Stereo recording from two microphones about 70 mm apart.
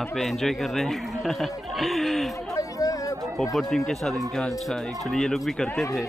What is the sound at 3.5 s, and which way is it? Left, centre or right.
Speech, centre.